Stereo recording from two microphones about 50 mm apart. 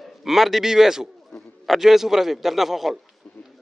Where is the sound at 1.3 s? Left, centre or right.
Centre.